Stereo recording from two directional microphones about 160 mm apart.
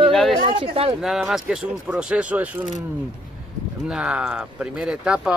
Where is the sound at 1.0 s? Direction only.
Centre (ahead or behind).